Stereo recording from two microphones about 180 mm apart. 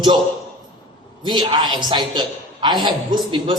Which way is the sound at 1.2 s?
25° right (ahead or behind).